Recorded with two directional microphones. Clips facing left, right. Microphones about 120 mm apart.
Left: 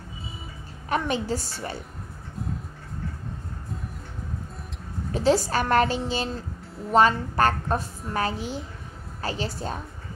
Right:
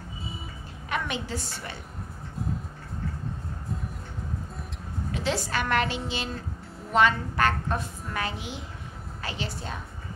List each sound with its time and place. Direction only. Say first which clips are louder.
0.8 s a woman's voice: left 6 dB; 40° left (ahead or behind)
5.1 s a woman's voice: left 7 dB; 40° left (ahead or behind)